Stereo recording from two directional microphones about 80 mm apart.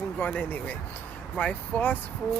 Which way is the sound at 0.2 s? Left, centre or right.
Left.